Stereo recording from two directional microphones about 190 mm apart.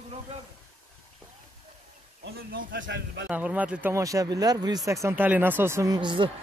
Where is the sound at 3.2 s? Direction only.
5° right (ahead or behind).